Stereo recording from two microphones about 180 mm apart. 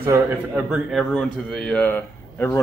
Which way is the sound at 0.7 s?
5° right (ahead or behind).